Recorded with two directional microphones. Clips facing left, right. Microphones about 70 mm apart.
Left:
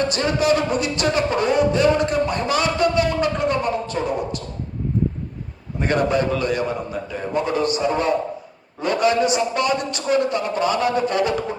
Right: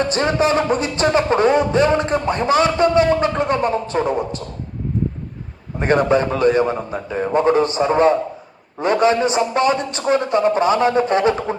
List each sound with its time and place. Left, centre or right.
0.1 s music: right
5.8 s music: right
8.8 s a man's voice: right